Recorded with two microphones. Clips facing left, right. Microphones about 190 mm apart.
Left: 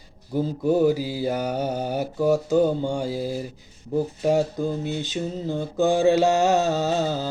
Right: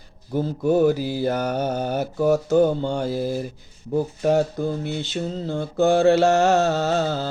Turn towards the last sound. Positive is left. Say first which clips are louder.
# right 1 dB
turn(degrees=15)  # may be behind; listen again after turning